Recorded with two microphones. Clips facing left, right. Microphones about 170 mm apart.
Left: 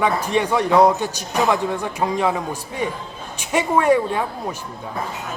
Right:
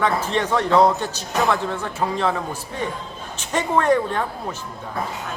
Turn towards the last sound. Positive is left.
turn(degrees=10)  # may be behind; listen again after turning